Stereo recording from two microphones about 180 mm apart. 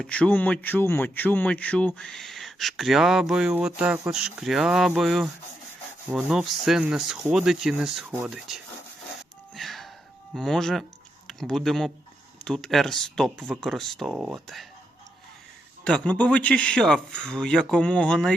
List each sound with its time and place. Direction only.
0.0 s speech: 5° left (ahead or behind)
9.6 s music: centre (ahead or behind)
10.3 s speech: 5° left (ahead or behind)
15.8 s speech: 5° left (ahead or behind)